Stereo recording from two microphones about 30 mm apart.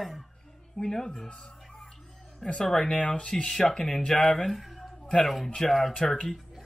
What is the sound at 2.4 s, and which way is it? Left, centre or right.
Speech, centre.